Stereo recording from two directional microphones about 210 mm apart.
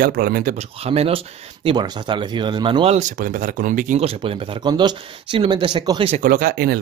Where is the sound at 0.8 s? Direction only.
30° right (ahead or behind).